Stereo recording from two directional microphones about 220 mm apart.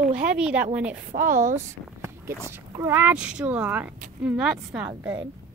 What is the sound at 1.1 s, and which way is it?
Speech, 40° right (ahead or behind).